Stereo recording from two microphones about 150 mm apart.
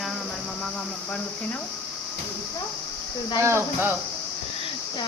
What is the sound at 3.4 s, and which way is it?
Speech, 15° right (ahead or behind).